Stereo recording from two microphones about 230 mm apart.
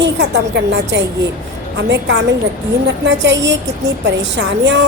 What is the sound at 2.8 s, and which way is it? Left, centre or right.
A woman's voice, right.